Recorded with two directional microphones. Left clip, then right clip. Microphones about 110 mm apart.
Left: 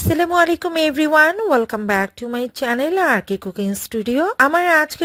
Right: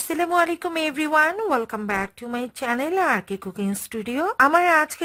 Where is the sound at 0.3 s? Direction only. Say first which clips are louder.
Left 5 dB; 35° left (ahead or behind).